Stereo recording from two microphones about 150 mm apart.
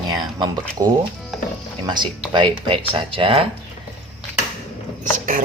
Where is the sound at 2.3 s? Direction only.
35° right (ahead or behind).